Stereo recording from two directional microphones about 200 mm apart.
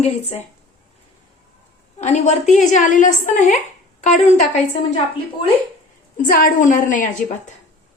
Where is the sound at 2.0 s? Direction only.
35° left (ahead or behind).